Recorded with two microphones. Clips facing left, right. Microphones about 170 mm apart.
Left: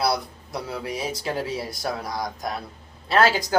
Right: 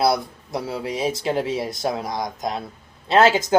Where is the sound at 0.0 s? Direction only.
25° right (ahead or behind).